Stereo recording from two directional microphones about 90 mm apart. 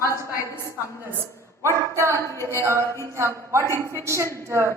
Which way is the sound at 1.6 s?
30° right (ahead or behind).